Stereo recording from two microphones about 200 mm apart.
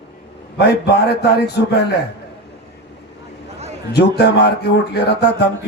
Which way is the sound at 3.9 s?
55° left (ahead or behind).